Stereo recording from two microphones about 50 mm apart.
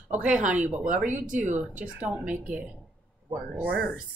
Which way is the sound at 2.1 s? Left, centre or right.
Right.